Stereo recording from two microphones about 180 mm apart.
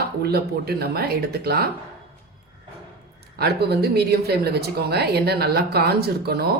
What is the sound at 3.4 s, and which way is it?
Speech, 60° right (ahead or behind).